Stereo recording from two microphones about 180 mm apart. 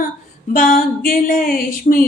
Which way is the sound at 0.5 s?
50° left (ahead or behind).